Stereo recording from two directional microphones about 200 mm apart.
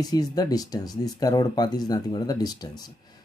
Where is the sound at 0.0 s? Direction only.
20° left (ahead or behind).